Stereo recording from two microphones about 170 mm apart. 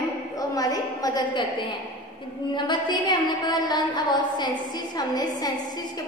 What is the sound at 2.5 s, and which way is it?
A woman's voice, 25° left (ahead or behind).